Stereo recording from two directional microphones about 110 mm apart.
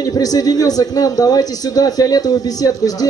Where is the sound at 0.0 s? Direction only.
35° left (ahead or behind).